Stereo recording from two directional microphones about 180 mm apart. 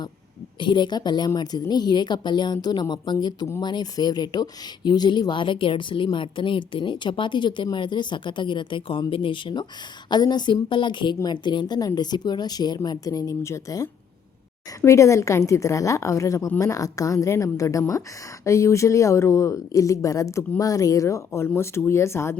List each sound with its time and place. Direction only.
0.6 s a woman's voice: 25° left (ahead or behind)